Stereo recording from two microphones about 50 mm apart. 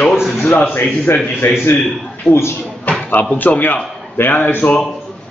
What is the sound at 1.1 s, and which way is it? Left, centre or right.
Speech, left.